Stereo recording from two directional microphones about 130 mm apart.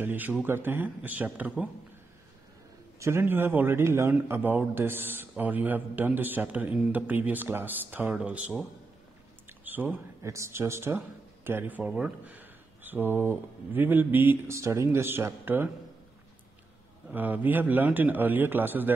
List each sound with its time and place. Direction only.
0.0 s speech: 15° right (ahead or behind)
3.0 s speech: 20° right (ahead or behind)
9.5 s a sound: 15° right (ahead or behind)
10.2 s speech: 25° right (ahead or behind)
17.1 s speech: 15° right (ahead or behind)